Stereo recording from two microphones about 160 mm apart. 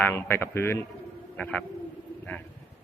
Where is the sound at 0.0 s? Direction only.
15° left (ahead or behind).